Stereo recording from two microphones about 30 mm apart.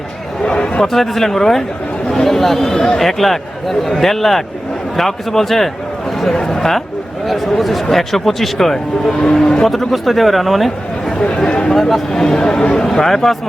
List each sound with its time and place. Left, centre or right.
0.4 s chatter: left
0.9 s speech: centre
7.3 s speech: centre
9.2 s speech: left
9.9 s speech: centre
11.4 s speech: left
11.7 s speech: centre
12.1 s speech: left